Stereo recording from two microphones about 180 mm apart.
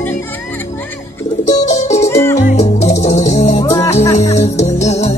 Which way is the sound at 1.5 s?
40° left (ahead or behind).